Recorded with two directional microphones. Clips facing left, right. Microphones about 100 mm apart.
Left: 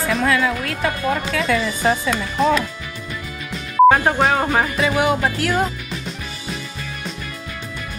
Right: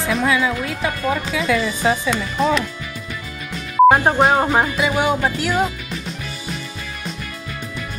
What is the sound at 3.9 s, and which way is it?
Speech, 15° right (ahead or behind).